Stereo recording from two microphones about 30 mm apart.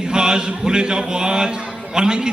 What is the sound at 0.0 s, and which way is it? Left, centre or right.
Speech, right.